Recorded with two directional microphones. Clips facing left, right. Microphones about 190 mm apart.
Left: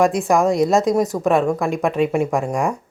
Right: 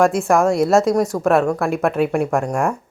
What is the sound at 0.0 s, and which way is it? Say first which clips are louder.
Speech: right 1 dB; centre (ahead or behind).